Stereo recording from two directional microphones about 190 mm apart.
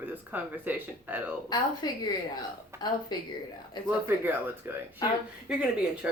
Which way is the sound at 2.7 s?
15° right (ahead or behind).